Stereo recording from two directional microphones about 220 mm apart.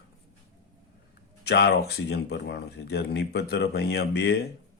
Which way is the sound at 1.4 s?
50° left (ahead or behind).